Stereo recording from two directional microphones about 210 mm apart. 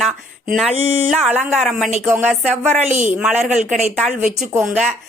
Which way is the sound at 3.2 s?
Centre (ahead or behind).